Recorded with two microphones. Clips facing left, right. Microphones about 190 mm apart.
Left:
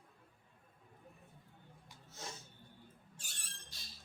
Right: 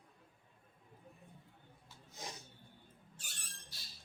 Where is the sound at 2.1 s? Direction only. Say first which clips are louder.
Even; 15° right (ahead or behind).